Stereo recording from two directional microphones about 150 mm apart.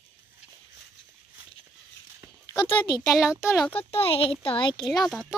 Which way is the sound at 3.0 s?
5° right (ahead or behind).